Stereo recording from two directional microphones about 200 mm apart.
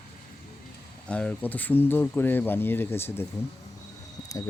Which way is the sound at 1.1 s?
5° left (ahead or behind).